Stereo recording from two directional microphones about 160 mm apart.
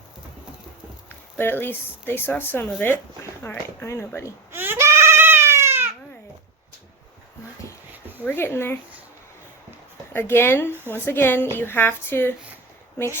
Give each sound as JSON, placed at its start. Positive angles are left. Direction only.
{"t": 1.4, "sound": "speech", "side_deg": 15}
{"t": 4.5, "sound": "goat", "side_deg": -15}
{"t": 8.2, "sound": "speech", "side_deg": 10}
{"t": 10.1, "sound": "speech", "side_deg": 15}
{"t": 10.7, "sound": "speech", "side_deg": -15}
{"t": 10.9, "sound": "speech", "side_deg": 15}